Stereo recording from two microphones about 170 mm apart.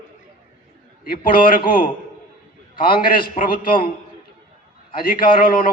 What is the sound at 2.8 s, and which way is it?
Speech, 30° left (ahead or behind).